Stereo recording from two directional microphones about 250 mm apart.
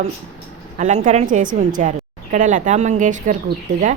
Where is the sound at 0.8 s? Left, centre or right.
Right.